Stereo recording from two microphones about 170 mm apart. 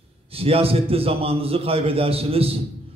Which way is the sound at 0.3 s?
35° right (ahead or behind).